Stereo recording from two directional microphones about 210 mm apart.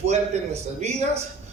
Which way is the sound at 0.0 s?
30° right (ahead or behind).